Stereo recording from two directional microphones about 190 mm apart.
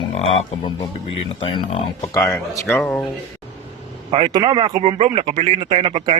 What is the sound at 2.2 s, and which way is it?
Speech, 15° left (ahead or behind).